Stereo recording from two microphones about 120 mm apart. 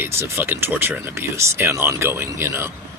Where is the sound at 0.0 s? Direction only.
20° right (ahead or behind).